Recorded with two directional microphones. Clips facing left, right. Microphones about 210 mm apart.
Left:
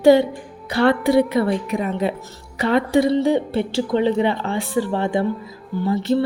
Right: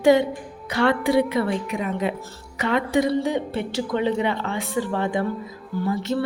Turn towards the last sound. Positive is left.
turn(degrees=30)  # may be behind; listen again after turning